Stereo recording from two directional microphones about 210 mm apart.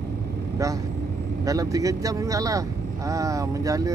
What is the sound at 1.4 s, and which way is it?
Speech, 15° right (ahead or behind).